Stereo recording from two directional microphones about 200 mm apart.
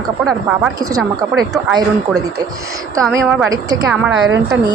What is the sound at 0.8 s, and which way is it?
Speech, 15° right (ahead or behind).